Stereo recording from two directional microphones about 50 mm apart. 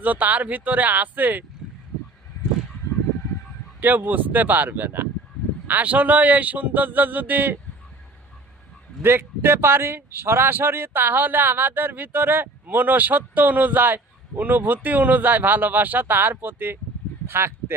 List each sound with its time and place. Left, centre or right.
0.0 s a man's voice: right
3.8 s a man's voice: right
9.0 s a man's voice: right
17.2 s speech: right